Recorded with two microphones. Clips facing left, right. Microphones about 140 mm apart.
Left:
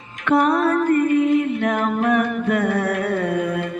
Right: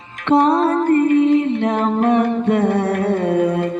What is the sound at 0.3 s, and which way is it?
Music, 30° right (ahead or behind).